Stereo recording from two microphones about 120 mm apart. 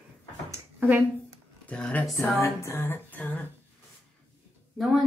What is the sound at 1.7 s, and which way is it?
Music, 10° left (ahead or behind).